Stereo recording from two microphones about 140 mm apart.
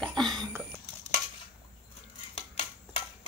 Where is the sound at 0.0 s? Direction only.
5° left (ahead or behind).